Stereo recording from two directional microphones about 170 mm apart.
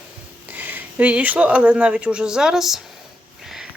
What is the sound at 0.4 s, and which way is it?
Speech, 10° right (ahead or behind).